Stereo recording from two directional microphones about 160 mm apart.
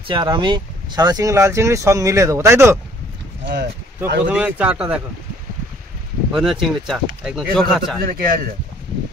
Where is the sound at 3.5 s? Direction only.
90° right.